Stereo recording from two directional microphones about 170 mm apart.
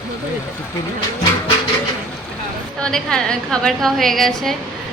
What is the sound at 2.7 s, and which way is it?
A woman's voice, 5° left (ahead or behind).